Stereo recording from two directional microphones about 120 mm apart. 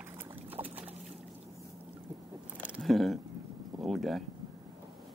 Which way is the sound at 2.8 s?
Centre (ahead or behind).